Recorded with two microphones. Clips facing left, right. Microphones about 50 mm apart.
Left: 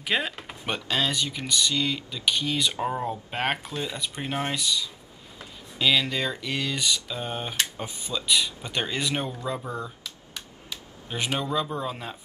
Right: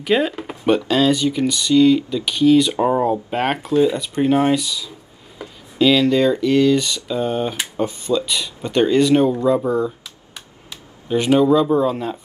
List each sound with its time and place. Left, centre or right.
0.0 s speech: centre
2.8 s speech: centre
3.3 s speech: centre
7.5 s a sound: centre
7.8 s speech: centre
9.7 s a sound: centre
11.1 s speech: centre